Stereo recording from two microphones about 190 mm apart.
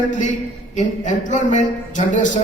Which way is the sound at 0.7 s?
40° left (ahead or behind).